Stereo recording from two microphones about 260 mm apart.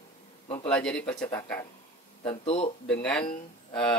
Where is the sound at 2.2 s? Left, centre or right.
Left.